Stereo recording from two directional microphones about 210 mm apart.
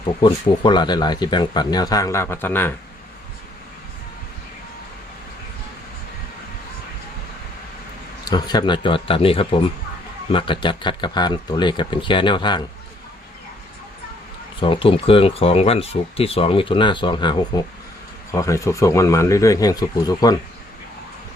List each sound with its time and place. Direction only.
0.2 s speech: 20° left (ahead or behind)
8.2 s speech: 20° left (ahead or behind)
14.6 s speech: 25° left (ahead or behind)